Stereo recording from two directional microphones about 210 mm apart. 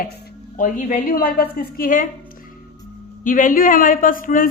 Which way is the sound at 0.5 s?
40° left (ahead or behind).